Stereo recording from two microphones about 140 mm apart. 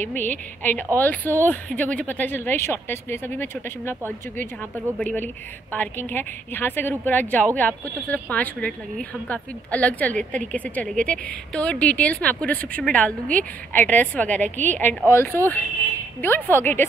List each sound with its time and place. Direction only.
0.0 s a woman's voice: 15° left (ahead or behind)